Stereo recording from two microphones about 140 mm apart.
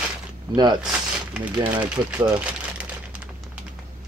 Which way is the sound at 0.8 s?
5° right (ahead or behind).